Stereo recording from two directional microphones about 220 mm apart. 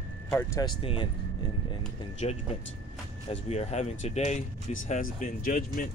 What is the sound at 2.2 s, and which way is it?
Speech, 30° left (ahead or behind).